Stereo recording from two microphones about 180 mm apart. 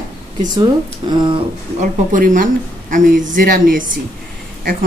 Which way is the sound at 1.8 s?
45° right (ahead or behind).